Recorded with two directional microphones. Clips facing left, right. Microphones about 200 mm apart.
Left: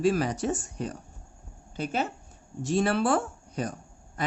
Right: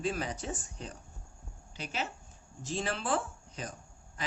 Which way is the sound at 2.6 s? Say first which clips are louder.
Left 11 dB; 65° left (ahead or behind).